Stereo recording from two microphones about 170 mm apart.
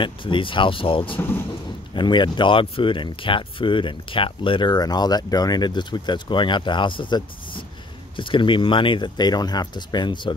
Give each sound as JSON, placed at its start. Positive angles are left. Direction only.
{"t": 0.0, "sound": "speech", "side_deg": 30}